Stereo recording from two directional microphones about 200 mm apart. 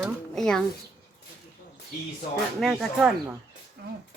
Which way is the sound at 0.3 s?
5° left (ahead or behind).